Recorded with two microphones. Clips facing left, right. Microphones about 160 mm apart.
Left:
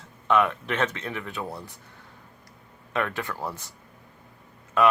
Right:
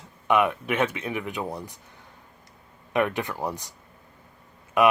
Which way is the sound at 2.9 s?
15° right (ahead or behind).